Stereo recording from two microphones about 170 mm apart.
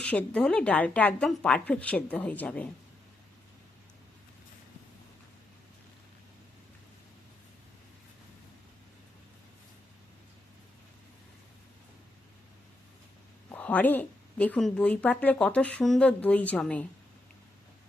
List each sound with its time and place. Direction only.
0.0 s a woman's voice: 10° left (ahead or behind)
13.5 s a woman's voice: 10° left (ahead or behind)